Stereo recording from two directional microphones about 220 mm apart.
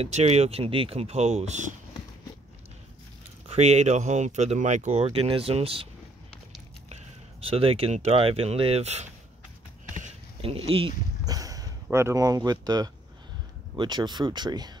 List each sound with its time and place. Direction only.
0.0 s speech: 30° right (ahead or behind)
3.4 s speech: 30° right (ahead or behind)
6.9 s speech: 25° right (ahead or behind)
9.9 s a sound: 30° right (ahead or behind)
13.7 s speech: 20° right (ahead or behind)